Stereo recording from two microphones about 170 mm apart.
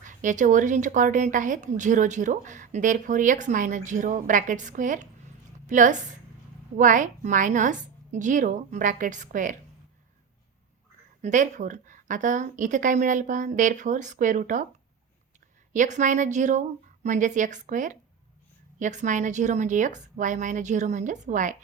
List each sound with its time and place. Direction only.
0.0 s speech: 50° right (ahead or behind)
11.2 s speech: 45° right (ahead or behind)
15.7 s speech: 45° right (ahead or behind)